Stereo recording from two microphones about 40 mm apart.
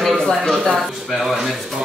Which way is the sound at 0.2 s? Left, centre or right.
Centre.